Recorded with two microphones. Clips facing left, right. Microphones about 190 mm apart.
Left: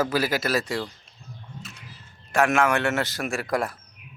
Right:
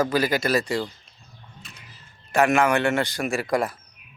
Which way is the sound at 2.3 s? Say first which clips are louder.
Right 2 dB; centre (ahead or behind).